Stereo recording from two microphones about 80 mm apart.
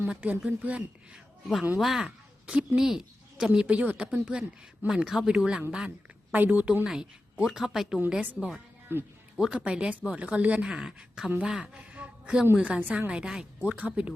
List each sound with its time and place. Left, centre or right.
0.1 s speech: centre
6.3 s a woman's voice: right
6.8 s speech: centre
8.9 s a woman's voice: right
9.4 s a man's voice: centre